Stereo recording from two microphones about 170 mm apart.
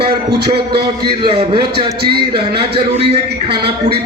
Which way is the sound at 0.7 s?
70° right (ahead or behind).